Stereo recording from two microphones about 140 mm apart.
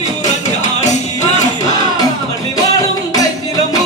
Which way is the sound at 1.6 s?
25° left (ahead or behind).